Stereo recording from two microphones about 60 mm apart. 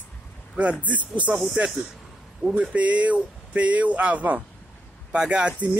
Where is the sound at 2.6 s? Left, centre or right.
Right.